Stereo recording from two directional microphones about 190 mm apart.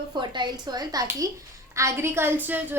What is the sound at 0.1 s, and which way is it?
A child's voice, 25° right (ahead or behind).